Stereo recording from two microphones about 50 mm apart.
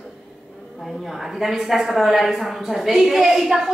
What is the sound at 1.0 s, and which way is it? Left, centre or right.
A woman's voice, centre.